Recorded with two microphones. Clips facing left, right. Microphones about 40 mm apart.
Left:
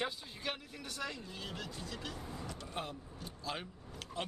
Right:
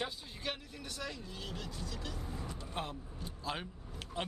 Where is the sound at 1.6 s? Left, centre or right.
Left.